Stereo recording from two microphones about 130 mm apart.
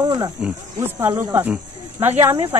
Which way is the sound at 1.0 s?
20° right (ahead or behind).